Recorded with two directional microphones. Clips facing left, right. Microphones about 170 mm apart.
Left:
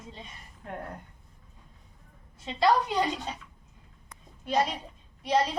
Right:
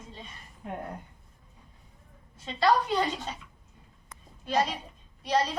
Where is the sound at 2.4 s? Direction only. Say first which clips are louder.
Even; 15° left (ahead or behind).